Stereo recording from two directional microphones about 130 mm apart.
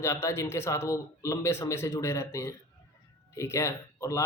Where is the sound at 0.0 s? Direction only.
20° left (ahead or behind).